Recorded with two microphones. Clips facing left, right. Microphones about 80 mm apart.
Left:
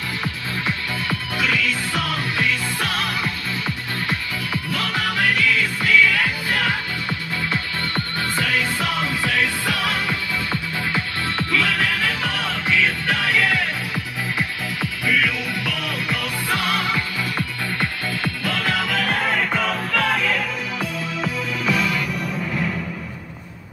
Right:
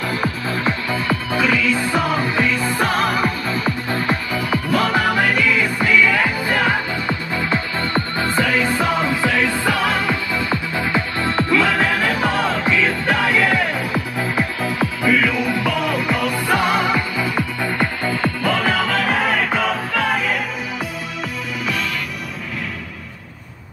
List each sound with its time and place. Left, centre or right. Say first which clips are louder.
0.2 s music: right 6 dB; right
11.8 s music: right 5 dB; right; by 18.8 s centre
18.9 s music: right 3 dB; centre